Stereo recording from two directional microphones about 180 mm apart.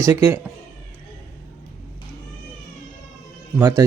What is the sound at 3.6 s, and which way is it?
Speech, 15° right (ahead or behind).